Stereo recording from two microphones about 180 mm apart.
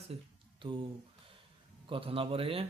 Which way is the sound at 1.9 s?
30° right (ahead or behind).